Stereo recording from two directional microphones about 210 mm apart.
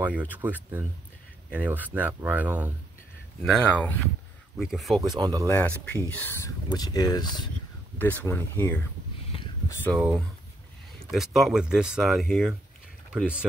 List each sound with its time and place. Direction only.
0.0 s speech: 10° right (ahead or behind)
3.4 s speech: 5° left (ahead or behind)
5.0 s speech: 20° right (ahead or behind)
5.5 s speech: 10° left (ahead or behind)
6.7 s speech: 20° left (ahead or behind)
8.0 s speech: 10° left (ahead or behind)
9.8 s speech: 15° right (ahead or behind)
11.1 s speech: centre (ahead or behind)